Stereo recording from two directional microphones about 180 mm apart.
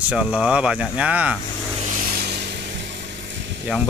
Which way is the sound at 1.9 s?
50° right (ahead or behind).